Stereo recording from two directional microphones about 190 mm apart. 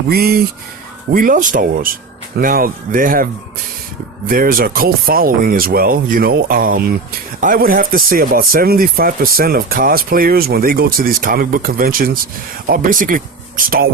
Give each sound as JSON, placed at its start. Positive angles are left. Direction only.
{"t": 0.1, "sound": "speech", "side_deg": -55}
{"t": 4.3, "sound": "speech", "side_deg": -50}